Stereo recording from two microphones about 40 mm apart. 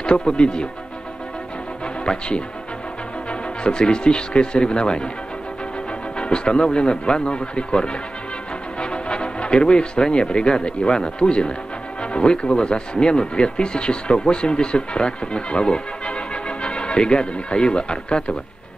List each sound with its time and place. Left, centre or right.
0.0 s speech: left
2.0 s speech: left
6.1 s speech: left